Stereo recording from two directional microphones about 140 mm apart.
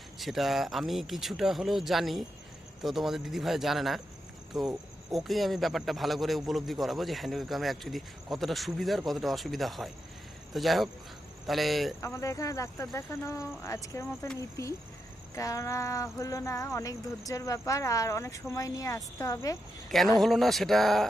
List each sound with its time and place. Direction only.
0.2 s a man's voice: centre (ahead or behind)
11.9 s speech: 20° left (ahead or behind)
20.1 s a man's voice: centre (ahead or behind)